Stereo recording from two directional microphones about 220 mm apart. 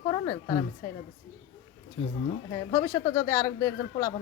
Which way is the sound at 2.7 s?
15° left (ahead or behind).